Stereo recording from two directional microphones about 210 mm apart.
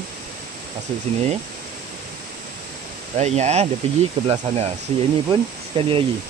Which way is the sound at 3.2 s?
30° right (ahead or behind).